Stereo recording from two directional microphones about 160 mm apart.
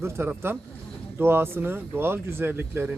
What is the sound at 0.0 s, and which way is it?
Speech, 15° right (ahead or behind).